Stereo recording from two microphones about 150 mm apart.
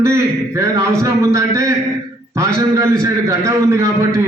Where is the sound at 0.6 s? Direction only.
20° right (ahead or behind).